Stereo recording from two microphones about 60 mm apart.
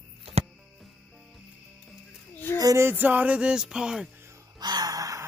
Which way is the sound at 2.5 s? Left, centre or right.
Left.